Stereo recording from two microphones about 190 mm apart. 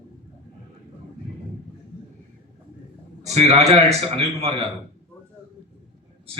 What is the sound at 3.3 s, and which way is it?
A man's voice, 35° right (ahead or behind).